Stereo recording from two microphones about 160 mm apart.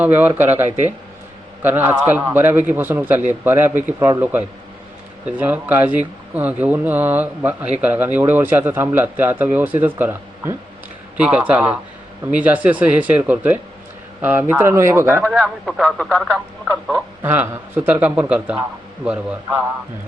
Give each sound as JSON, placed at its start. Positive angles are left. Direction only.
{"t": 0.0, "sound": "a man's voice", "side_deg": -10}
{"t": 15.3, "sound": "speech", "side_deg": 0}
{"t": 17.2, "sound": "a man's voice", "side_deg": -15}